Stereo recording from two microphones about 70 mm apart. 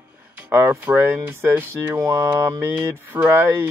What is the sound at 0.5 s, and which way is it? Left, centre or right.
Speech, right.